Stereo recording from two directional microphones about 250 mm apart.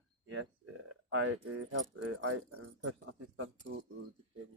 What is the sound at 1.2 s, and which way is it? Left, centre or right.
Keys jangling, right.